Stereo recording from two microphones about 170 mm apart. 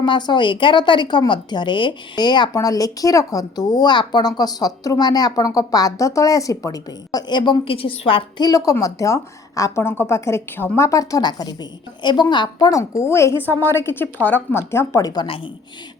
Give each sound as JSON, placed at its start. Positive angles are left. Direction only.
{"t": 0.0, "sound": "a woman's voice", "side_deg": 25}